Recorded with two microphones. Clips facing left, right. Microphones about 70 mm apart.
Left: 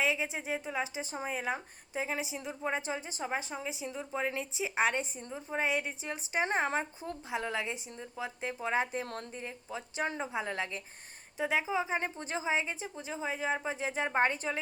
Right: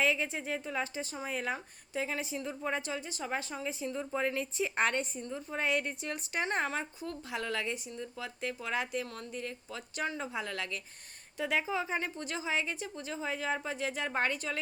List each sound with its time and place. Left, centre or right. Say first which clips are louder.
0.0 s a woman's voice: right 1 dB; centre